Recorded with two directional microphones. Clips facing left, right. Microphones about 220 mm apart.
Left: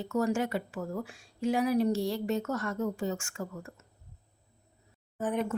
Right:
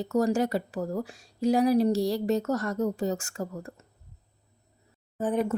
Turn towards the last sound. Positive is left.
turn(degrees=-35)  # may be behind; listen again after turning